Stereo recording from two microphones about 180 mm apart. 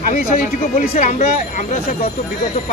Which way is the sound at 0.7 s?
50° left (ahead or behind).